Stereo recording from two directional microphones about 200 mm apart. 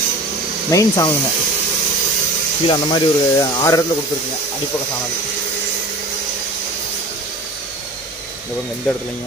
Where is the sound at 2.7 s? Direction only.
25° left (ahead or behind).